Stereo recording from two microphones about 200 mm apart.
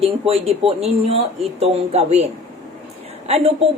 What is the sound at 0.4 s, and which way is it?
A woman's voice, 30° right (ahead or behind).